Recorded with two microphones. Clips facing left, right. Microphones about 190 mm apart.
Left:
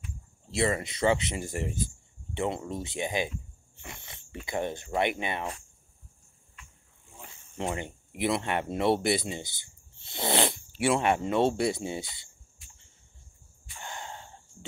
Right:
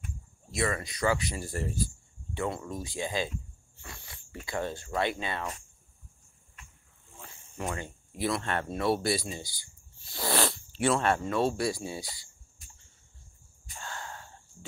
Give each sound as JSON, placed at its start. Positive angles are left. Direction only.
{"t": 0.5, "sound": "speech", "side_deg": 25}
{"t": 2.3, "sound": "zipper", "side_deg": 20}
{"t": 4.5, "sound": "speech", "side_deg": 20}
{"t": 7.2, "sound": "a sound", "side_deg": 20}
{"t": 10.8, "sound": "speech", "side_deg": 15}
{"t": 13.7, "sound": "wheeze", "side_deg": 20}